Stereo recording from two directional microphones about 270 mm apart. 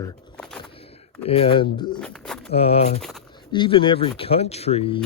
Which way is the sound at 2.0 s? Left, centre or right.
Centre.